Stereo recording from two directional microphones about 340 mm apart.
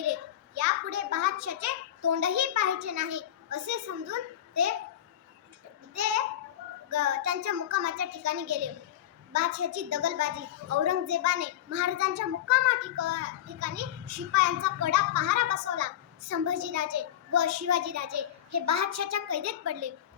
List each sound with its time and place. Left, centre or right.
0.0 s a child's voice: right
5.9 s a child's voice: right